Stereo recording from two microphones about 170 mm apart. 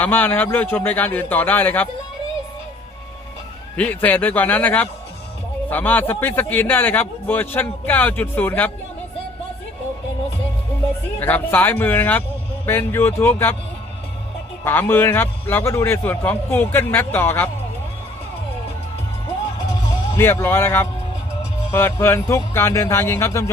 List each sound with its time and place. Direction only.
0.0 s a man's voice: 10° left (ahead or behind)
3.8 s a man's voice: 10° left (ahead or behind)
11.2 s a man's voice: 10° left (ahead or behind)
14.6 s a man's voice: 15° left (ahead or behind)
20.4 s a man's voice: 15° left (ahead or behind)